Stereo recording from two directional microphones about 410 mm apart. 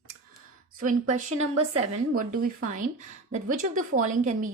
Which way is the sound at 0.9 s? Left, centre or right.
Centre.